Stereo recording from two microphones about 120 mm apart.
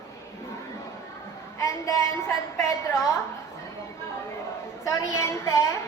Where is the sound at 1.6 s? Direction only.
25° left (ahead or behind).